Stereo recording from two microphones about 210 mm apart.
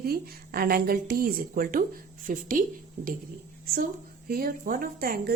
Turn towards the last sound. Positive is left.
turn(degrees=-45)  # may be behind; listen again after turning